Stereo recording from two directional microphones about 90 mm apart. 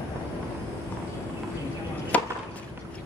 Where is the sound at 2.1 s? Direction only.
15° left (ahead or behind).